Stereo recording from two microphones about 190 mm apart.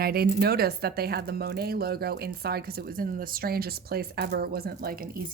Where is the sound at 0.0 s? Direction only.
55° right (ahead or behind).